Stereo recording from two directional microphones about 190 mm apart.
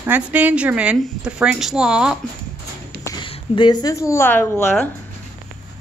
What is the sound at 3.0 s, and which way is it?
A woman's voice, 25° left (ahead or behind).